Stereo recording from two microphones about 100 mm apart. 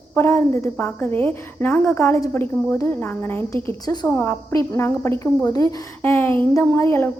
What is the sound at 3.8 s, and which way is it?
Speech, 40° left (ahead or behind).